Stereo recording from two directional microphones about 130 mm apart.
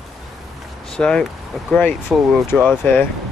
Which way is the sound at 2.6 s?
15° left (ahead or behind).